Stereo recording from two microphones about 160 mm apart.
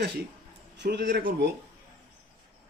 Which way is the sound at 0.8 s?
90° right.